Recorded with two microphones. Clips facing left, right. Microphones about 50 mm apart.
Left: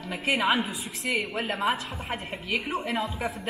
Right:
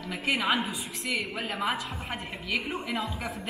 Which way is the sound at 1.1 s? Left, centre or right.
Centre.